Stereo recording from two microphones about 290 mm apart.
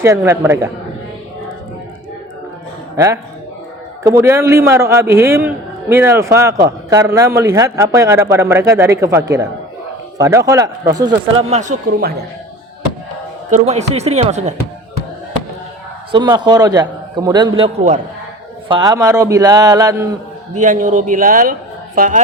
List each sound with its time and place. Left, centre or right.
0.0 s speech: centre
2.9 s a man's voice: centre; by 12.1 s right
13.5 s speech: right
16.1 s speech: centre
17.6 s speech: right
18.7 s speech: centre
20.6 s speech: right